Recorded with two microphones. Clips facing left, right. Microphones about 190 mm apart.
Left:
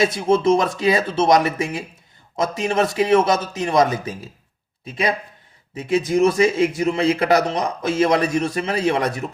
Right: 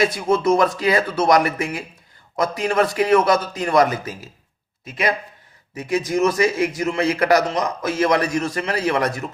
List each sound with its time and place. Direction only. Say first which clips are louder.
0.0 s a man's voice: left 1 dB; 25° left (ahead or behind)
5.7 s a man's voice: left 2 dB; 25° left (ahead or behind)